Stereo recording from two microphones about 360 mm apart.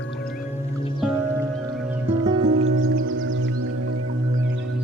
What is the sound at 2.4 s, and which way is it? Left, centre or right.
Music, right.